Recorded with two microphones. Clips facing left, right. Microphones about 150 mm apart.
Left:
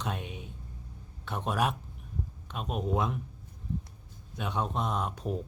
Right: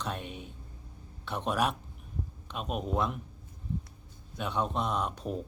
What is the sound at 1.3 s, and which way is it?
Speech, 5° left (ahead or behind).